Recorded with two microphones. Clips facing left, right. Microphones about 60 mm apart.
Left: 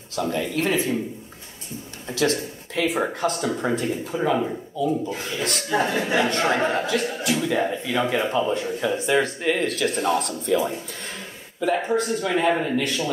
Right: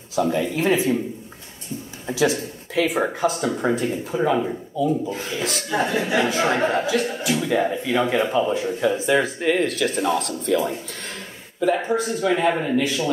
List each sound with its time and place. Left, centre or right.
0.1 s speech: centre
2.0 s speech: centre